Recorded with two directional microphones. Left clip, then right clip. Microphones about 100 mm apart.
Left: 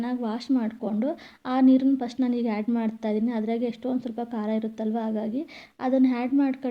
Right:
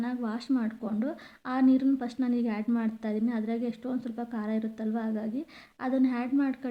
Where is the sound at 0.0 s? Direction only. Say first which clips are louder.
Left 4 dB; 25° left (ahead or behind).